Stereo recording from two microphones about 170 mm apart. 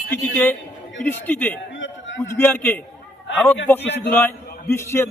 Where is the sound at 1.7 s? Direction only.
90° left.